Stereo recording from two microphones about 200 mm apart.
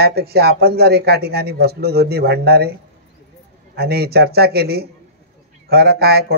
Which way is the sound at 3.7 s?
50° right (ahead or behind).